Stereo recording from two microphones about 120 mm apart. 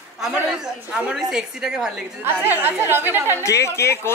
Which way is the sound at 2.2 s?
15° right (ahead or behind).